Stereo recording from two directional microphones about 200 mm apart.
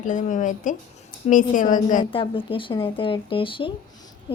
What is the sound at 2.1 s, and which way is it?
Speech, 25° left (ahead or behind).